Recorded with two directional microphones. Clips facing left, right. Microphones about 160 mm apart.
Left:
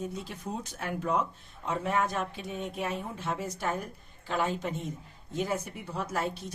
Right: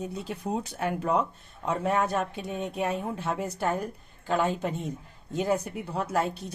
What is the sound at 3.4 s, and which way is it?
Speech, 60° right (ahead or behind).